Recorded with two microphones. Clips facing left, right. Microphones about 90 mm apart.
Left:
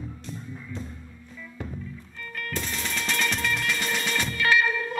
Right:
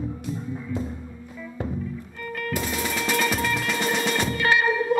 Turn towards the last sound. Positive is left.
turn(degrees=-20)  # may be behind; listen again after turning